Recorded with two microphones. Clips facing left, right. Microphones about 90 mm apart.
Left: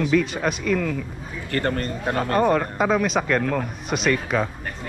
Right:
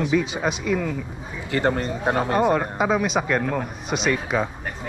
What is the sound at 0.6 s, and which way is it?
Speech, 15° right (ahead or behind).